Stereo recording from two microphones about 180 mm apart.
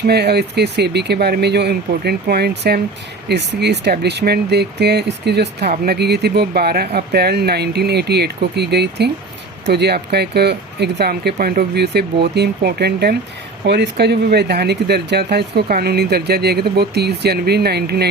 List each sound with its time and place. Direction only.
0.1 s speech: 65° right (ahead or behind)